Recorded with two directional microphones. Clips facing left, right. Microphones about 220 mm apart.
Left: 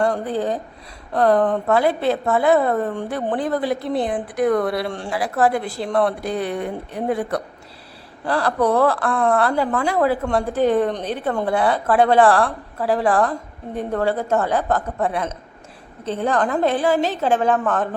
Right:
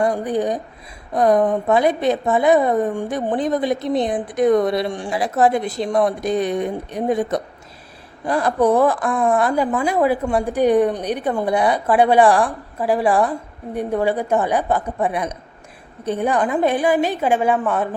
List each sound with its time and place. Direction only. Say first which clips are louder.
0.0 s a woman's voice: right 2 dB; 15° right (ahead or behind)